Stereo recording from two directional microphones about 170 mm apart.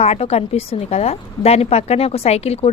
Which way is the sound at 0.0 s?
40° left (ahead or behind).